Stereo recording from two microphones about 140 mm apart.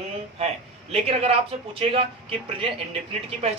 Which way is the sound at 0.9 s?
45° right (ahead or behind).